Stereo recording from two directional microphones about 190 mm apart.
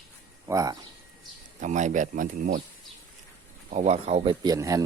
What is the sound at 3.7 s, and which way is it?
Speech, 40° right (ahead or behind).